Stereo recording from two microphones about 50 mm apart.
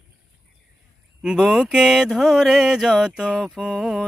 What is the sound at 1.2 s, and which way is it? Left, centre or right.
Speech, centre.